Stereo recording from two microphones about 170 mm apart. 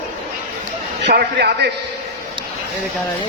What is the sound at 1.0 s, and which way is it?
Speech, 80° right.